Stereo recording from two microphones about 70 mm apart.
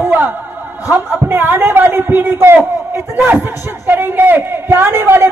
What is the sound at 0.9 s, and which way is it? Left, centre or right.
A man's voice, right.